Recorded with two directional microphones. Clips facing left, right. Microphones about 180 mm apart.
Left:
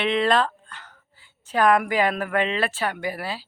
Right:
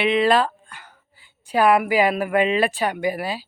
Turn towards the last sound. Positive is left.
turn(degrees=-15)  # may be behind; listen again after turning